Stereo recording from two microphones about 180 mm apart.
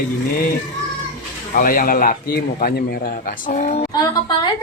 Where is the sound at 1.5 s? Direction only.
55° left (ahead or behind).